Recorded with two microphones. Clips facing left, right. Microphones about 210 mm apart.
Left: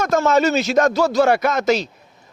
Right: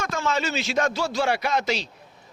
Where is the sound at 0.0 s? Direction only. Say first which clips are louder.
Left 10 dB; 40° left (ahead or behind).